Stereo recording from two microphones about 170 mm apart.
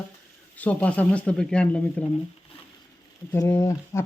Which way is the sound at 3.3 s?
15° left (ahead or behind).